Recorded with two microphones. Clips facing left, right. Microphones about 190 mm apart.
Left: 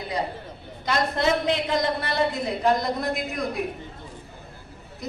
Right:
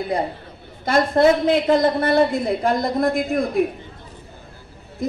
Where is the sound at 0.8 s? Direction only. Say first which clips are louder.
Right 8 dB; 50° right (ahead or behind).